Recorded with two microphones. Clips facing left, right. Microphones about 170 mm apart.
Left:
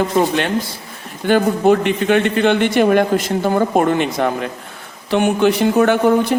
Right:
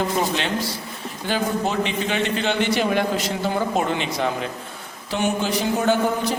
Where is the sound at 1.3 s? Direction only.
55° left (ahead or behind).